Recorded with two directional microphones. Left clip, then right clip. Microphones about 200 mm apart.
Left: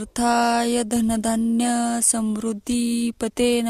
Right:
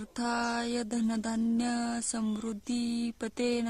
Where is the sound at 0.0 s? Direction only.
35° left (ahead or behind).